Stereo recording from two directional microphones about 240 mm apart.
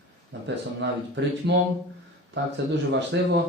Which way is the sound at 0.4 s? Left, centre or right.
Right.